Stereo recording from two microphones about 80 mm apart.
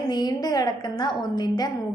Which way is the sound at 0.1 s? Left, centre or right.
Left.